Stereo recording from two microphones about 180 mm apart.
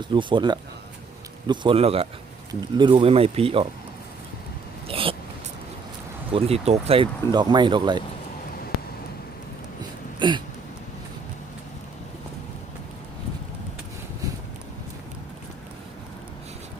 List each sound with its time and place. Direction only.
0.0 s speech: 25° right (ahead or behind)
4.9 s hiccup: 30° right (ahead or behind)
6.3 s speech: 35° right (ahead or behind)
10.2 s a sound: 25° right (ahead or behind)